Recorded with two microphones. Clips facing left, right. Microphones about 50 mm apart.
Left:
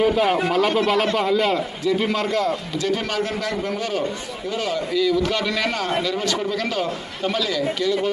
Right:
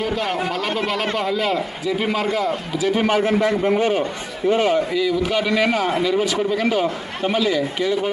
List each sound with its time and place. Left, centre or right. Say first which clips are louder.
0.0 s a man's voice: left 4 dB; centre; by 4.8 s right
4.9 s a man's voice: even; centre